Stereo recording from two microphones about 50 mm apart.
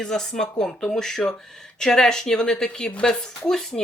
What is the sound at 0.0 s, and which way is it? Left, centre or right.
Speech, centre.